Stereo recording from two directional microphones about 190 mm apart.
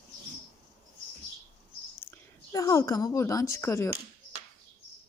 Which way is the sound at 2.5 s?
15° left (ahead or behind).